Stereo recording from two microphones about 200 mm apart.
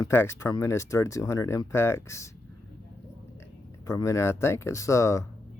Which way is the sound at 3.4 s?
15° left (ahead or behind).